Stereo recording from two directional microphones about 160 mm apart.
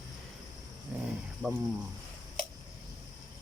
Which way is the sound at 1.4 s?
20° right (ahead or behind).